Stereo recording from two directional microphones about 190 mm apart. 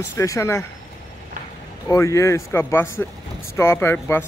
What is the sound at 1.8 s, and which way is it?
Speech, 15° left (ahead or behind).